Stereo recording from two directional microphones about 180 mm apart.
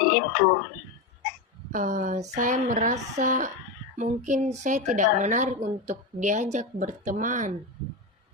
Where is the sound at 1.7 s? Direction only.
45° right (ahead or behind).